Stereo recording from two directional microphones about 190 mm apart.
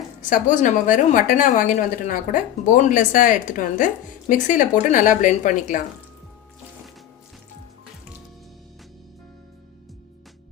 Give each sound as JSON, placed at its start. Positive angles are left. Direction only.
{"t": 0.2, "sound": "a woman's voice", "side_deg": 45}